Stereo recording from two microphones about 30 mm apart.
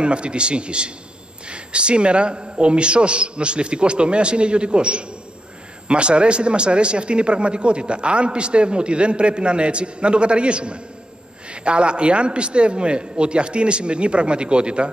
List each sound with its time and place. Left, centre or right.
0.0 s a man's voice: right